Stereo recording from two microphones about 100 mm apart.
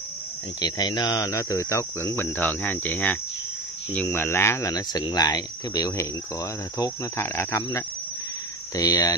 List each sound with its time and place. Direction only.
0.6 s speech: 45° left (ahead or behind); by 4.6 s 25° left (ahead or behind)
4.6 s speech: 40° left (ahead or behind)